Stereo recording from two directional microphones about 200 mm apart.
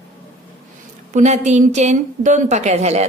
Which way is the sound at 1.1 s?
35° right (ahead or behind).